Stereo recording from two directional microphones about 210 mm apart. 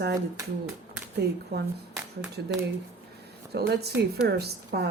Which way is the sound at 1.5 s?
50° right (ahead or behind).